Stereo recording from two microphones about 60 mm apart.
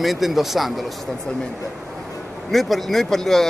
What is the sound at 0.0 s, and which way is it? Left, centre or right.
Speech, centre.